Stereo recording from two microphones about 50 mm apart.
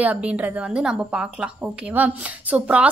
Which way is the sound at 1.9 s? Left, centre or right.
Right.